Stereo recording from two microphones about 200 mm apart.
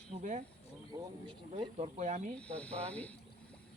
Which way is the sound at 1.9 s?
35° right (ahead or behind).